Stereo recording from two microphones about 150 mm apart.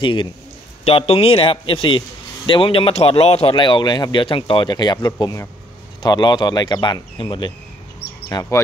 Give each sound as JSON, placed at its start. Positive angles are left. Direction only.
{"t": 0.0, "sound": "a man's voice", "side_deg": 35}